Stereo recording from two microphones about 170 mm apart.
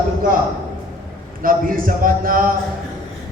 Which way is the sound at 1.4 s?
55° right (ahead or behind).